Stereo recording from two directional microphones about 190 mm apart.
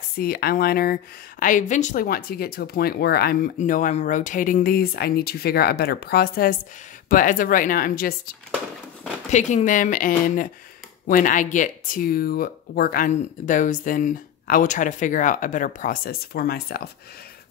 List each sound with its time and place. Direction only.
0.2 s speech: 50° left (ahead or behind)
3.5 s speech: 45° left (ahead or behind)
9.3 s speech: 40° left (ahead or behind); by 16.9 s 55° left (ahead or behind)